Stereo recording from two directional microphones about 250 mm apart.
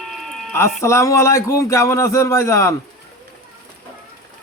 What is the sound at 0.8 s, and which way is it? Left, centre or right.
Speech, centre.